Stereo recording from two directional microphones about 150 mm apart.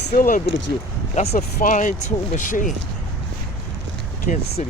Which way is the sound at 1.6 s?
60° left (ahead or behind).